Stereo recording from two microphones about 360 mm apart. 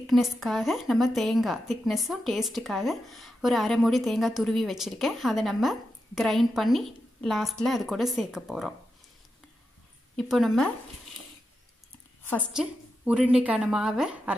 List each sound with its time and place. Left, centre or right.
0.0 s a woman's voice: centre
10.1 s a woman's voice: centre
12.3 s a woman's voice: centre